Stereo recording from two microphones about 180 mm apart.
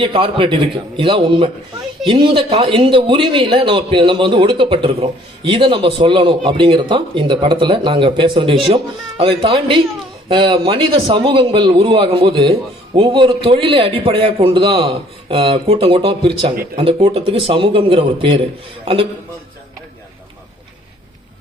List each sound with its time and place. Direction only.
0.0 s a man's voice: 30° right (ahead or behind)